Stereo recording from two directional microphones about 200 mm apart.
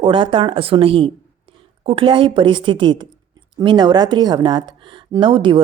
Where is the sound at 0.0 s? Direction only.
25° right (ahead or behind).